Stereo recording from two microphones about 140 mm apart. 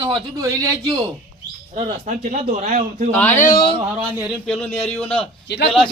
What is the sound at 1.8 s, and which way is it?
Speech, 55° right (ahead or behind).